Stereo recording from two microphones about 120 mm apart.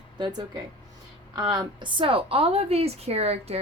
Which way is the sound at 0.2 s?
35° right (ahead or behind).